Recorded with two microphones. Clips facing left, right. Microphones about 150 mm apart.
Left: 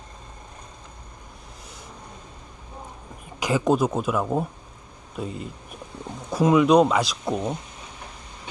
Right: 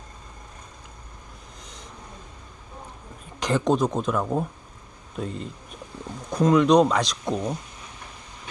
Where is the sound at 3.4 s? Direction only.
5° left (ahead or behind).